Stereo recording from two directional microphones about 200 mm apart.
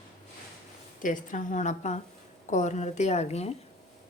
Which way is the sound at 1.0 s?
40° left (ahead or behind).